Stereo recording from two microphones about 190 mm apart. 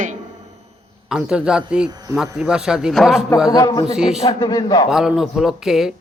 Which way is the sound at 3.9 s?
5° right (ahead or behind).